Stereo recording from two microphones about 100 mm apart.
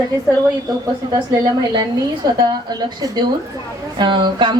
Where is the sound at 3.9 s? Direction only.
50° right (ahead or behind).